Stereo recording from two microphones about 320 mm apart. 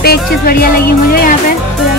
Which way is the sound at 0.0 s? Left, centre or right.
Left.